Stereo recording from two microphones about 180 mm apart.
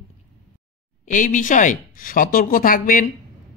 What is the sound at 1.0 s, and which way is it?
Speech, 45° left (ahead or behind).